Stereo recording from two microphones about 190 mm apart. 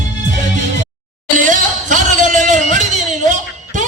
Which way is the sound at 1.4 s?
40° right (ahead or behind).